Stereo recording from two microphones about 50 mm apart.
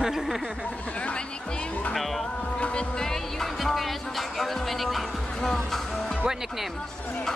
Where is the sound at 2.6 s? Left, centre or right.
Centre.